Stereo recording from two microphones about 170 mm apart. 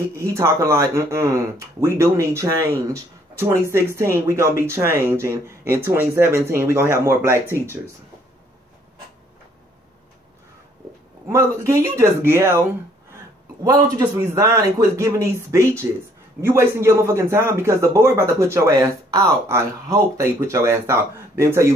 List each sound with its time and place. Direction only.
0.1 s a man's voice: 15° right (ahead or behind)
11.2 s a man's voice: 15° right (ahead or behind)
13.9 s a man's voice: 20° right (ahead or behind)